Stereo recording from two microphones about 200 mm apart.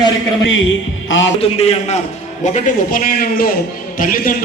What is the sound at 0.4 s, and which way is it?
Speech, 70° left (ahead or behind).